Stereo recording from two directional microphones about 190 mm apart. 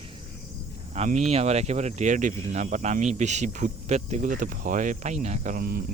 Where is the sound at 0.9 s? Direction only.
35° right (ahead or behind).